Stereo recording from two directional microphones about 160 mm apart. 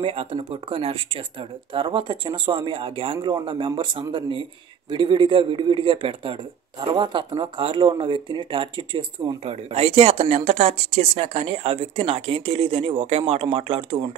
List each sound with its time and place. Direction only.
0.0 s speech: 35° right (ahead or behind)
9.4 s speech: 40° right (ahead or behind)